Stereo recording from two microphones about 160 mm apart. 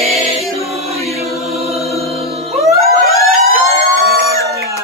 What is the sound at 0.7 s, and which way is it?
Choir, 40° right (ahead or behind).